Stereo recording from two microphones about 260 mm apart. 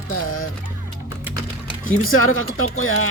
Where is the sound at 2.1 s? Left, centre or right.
Left.